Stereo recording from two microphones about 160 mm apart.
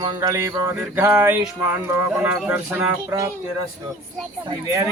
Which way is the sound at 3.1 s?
20° right (ahead or behind).